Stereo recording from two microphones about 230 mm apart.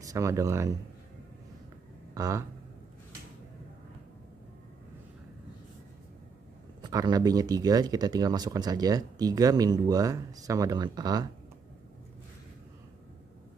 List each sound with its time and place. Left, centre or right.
0.0 s speech: centre
2.1 s speech: centre
6.8 s speech: centre